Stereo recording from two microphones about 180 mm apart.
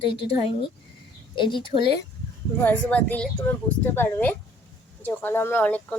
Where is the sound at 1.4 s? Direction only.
25° left (ahead or behind).